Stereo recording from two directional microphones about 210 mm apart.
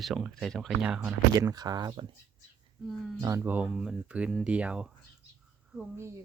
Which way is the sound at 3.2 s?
10° right (ahead or behind).